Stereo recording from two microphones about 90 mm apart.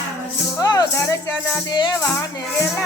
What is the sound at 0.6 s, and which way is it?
Music, 40° left (ahead or behind).